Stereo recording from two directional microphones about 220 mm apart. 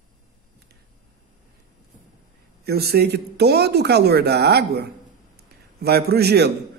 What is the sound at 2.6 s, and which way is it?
A man's voice, 45° right (ahead or behind).